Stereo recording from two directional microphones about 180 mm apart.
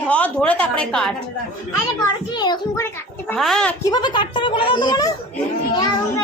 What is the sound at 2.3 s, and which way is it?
A child's voice, 25° left (ahead or behind).